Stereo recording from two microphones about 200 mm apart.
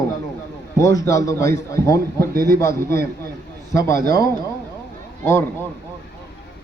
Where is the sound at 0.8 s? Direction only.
15° left (ahead or behind).